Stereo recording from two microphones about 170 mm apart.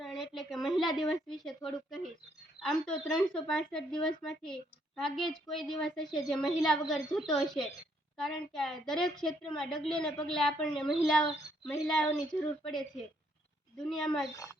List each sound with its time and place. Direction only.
0.0 s a woman's voice: centre (ahead or behind)
11.2 s speech: 30° left (ahead or behind)
11.9 s a woman's voice: 5° left (ahead or behind)
13.7 s a woman's voice: 5° left (ahead or behind)